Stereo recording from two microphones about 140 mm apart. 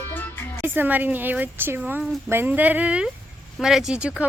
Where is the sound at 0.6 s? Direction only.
15° right (ahead or behind).